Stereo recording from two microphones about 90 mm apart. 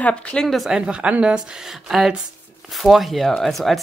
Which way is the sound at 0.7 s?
10° right (ahead or behind).